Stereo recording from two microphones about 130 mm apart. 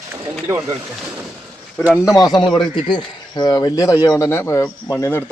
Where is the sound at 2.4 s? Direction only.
40° left (ahead or behind); by 5.2 s 25° left (ahead or behind).